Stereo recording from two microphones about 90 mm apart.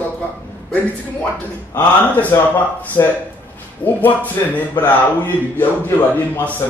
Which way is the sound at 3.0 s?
35° left (ahead or behind).